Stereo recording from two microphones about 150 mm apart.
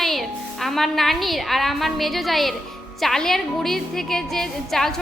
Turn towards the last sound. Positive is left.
turn(degrees=0)  # may be behind; listen again after turning